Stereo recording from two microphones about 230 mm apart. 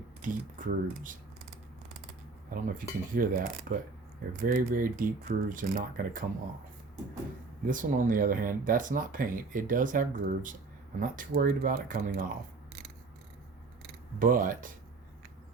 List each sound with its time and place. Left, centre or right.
0.2 s speech: right
2.5 s speech: right
7.7 s speech: right
14.2 s speech: right